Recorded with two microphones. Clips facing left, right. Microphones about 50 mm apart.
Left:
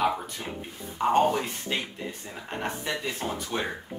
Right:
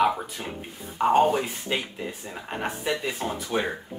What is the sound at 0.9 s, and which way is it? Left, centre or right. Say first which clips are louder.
Speech: right 3 dB; centre.